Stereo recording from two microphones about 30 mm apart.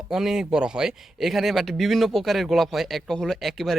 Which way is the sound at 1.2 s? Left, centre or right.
Centre.